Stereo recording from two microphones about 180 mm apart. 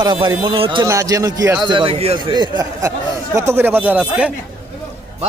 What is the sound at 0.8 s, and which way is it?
Speech, 15° right (ahead or behind).